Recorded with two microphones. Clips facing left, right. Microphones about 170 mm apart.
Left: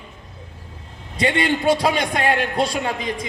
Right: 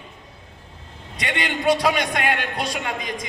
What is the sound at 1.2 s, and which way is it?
A man's voice, 30° left (ahead or behind).